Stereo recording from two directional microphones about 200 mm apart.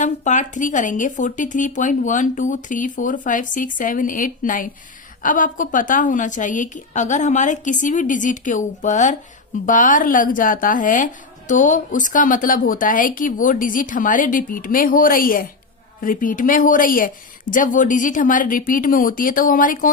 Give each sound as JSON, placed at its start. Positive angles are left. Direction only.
{"t": 0.0, "sound": "a woman's voice", "side_deg": 40}